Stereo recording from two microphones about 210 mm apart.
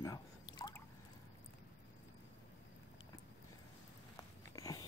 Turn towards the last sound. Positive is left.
turn(degrees=15)  # may be behind; listen again after turning